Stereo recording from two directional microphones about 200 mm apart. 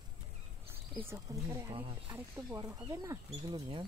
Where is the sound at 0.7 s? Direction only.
10° right (ahead or behind).